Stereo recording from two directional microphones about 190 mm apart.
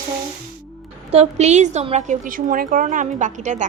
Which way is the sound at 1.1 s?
35° right (ahead or behind).